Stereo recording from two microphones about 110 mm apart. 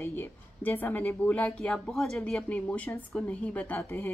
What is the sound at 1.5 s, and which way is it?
Speech, 10° left (ahead or behind).